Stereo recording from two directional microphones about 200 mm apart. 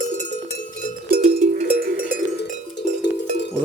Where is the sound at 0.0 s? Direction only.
40° right (ahead or behind).